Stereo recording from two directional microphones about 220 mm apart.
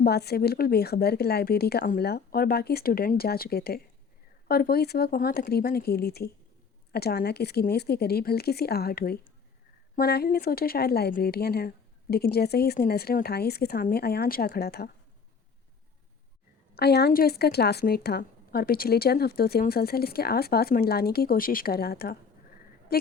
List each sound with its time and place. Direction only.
0.0 s speech: 45° left (ahead or behind)
16.7 s speech: 50° left (ahead or behind)